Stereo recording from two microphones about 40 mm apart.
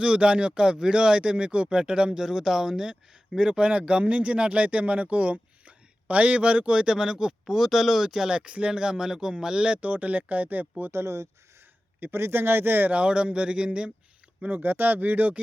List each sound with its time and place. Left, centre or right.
0.0 s speech: right
2.1 s speech: centre
9.8 s speech: right
11.9 s speech: right
12.9 s speech: right
14.4 s speech: right